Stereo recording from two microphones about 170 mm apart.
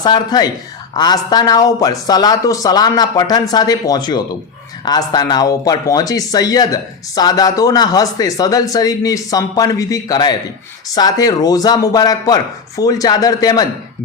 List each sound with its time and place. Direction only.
0.0 s speech: 25° left (ahead or behind)